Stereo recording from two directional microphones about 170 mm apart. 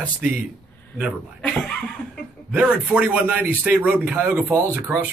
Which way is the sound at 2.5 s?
10° right (ahead or behind).